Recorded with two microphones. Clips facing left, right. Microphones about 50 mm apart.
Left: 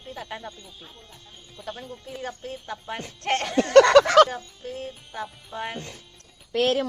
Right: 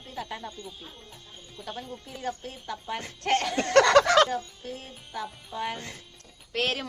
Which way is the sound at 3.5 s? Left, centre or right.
Left.